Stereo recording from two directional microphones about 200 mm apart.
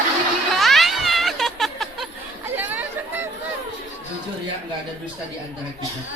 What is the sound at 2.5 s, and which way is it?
Chatter, 10° right (ahead or behind).